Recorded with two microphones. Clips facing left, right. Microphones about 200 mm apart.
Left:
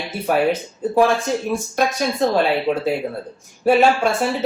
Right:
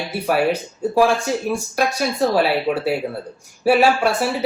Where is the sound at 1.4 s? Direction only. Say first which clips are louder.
Even; 15° right (ahead or behind).